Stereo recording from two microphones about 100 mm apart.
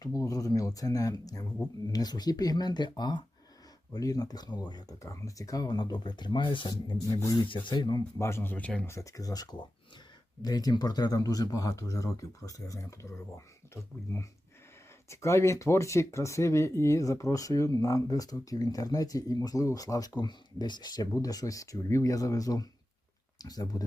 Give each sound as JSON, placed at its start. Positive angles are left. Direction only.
{"t": 0.0, "sound": "speech", "side_deg": 35}
{"t": 5.0, "sound": "speech", "side_deg": 30}
{"t": 7.2, "sound": "speech", "side_deg": 40}
{"t": 7.4, "sound": "speech", "side_deg": 55}
{"t": 8.2, "sound": "speech", "side_deg": 25}
{"t": 8.9, "sound": "speech", "side_deg": 30}